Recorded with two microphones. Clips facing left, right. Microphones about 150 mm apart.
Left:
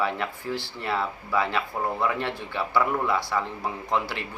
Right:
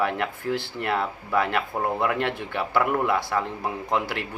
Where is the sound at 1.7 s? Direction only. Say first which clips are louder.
Right 2 dB; 15° right (ahead or behind).